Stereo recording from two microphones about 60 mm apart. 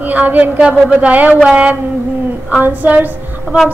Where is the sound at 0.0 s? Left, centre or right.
Right.